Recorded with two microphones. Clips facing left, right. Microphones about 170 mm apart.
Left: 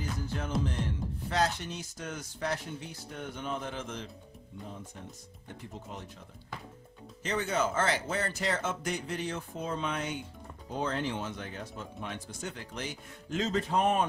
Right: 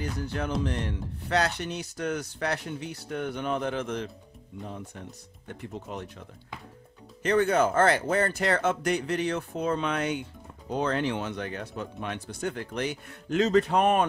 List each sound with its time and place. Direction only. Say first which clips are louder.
0.2 s speech: right 4 dB; 70° right (ahead or behind)
5.5 s speech: right 6 dB; 65° right (ahead or behind)
7.2 s speech: right 8 dB; 60° right (ahead or behind)